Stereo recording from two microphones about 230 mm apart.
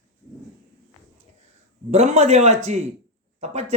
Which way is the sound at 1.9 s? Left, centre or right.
Right.